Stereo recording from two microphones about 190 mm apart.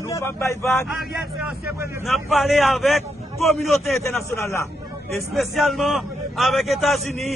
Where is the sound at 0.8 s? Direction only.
Centre (ahead or behind).